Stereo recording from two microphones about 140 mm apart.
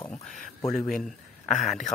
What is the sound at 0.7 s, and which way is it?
Speech, 5° left (ahead or behind).